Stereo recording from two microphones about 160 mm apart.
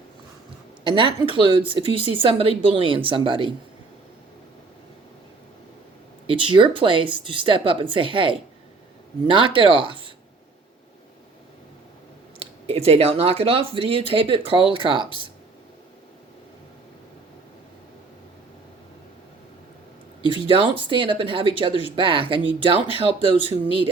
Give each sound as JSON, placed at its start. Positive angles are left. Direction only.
{"t": 0.9, "sound": "speech", "side_deg": -30}
{"t": 6.2, "sound": "speech", "side_deg": -35}
{"t": 12.4, "sound": "speech", "side_deg": -35}
{"t": 20.5, "sound": "speech", "side_deg": -35}